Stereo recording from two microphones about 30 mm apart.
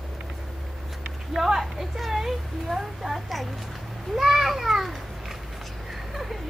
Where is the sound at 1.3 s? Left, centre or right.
Centre.